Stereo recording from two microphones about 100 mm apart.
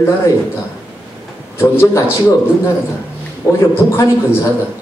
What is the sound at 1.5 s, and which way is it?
Speech, 25° left (ahead or behind).